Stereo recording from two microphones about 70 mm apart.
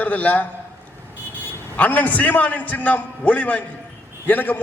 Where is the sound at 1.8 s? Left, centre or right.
Left.